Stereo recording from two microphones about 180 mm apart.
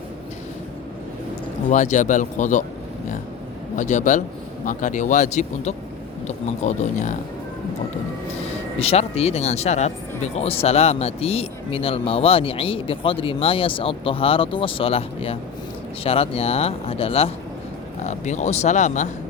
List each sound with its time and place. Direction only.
1.7 s a man's voice: 45° left (ahead or behind)
3.8 s a man's voice: 45° left (ahead or behind)
8.8 s speech: 35° left (ahead or behind)